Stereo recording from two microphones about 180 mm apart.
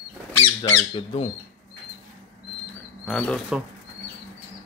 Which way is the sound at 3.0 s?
5° left (ahead or behind).